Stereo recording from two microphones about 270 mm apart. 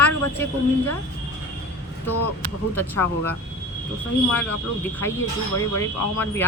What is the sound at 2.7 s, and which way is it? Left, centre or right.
Speech, centre.